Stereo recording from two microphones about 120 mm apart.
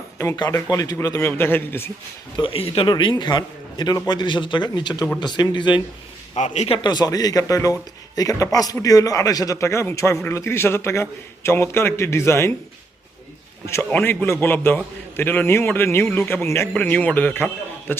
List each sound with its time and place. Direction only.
0.3 s a man's voice: 35° left (ahead or behind)
2.3 s speech: 45° left (ahead or behind)
2.8 s a man's voice: 40° left (ahead or behind)
6.3 s a man's voice: 75° left (ahead or behind)
6.7 s a man's voice: 40° left (ahead or behind); by 12.5 s 20° left (ahead or behind)
13.9 s a man's voice: 15° left (ahead or behind)